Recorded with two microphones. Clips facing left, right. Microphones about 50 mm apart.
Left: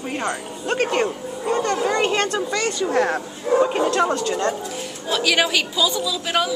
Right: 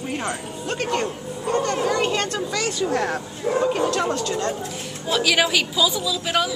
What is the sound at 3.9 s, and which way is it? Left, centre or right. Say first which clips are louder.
Speech: left 3 dB; centre.